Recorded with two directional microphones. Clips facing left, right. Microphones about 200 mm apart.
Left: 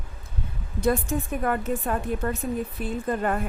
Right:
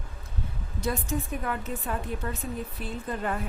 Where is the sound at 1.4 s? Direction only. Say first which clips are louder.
Left 7 dB; 50° left (ahead or behind).